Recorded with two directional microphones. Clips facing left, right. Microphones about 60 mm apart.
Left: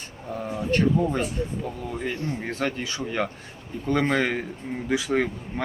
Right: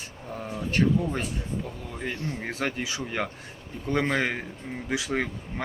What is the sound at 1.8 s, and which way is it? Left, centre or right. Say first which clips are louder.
Speech: left 7 dB; centre.